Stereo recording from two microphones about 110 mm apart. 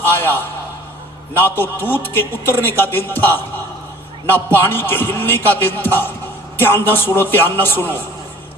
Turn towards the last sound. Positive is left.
turn(degrees=20)  # may be behind; listen again after turning